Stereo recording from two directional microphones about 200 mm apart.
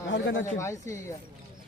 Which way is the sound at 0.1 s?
65° left (ahead or behind).